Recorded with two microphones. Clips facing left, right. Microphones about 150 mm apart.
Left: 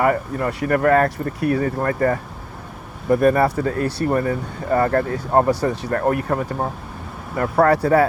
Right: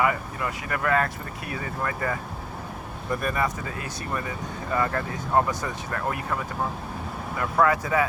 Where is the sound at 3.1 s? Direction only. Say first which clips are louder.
Left 11 dB; 60° left (ahead or behind).